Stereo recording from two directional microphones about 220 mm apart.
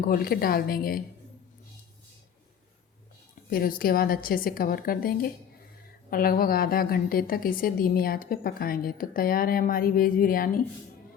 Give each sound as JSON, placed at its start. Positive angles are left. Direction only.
{"t": 0.0, "sound": "a woman's voice", "side_deg": 40}
{"t": 3.5, "sound": "a woman's voice", "side_deg": 40}